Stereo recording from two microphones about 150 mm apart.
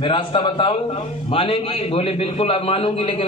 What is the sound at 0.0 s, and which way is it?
A man's voice, 35° left (ahead or behind).